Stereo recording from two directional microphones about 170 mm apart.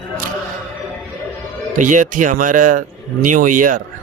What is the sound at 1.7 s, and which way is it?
A man's voice, 50° right (ahead or behind).